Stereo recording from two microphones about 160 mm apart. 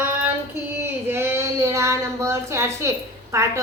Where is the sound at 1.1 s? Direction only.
15° right (ahead or behind).